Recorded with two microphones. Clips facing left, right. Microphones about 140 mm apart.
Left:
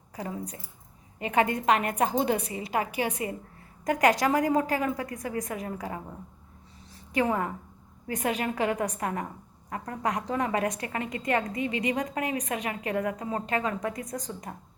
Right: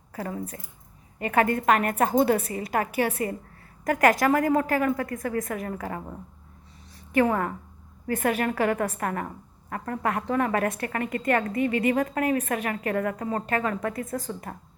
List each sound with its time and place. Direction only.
0.1 s a woman's voice: 15° left (ahead or behind)
7.2 s a woman's voice: 15° left (ahead or behind)